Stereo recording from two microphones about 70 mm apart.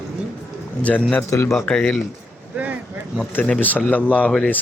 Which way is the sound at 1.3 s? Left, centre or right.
Left.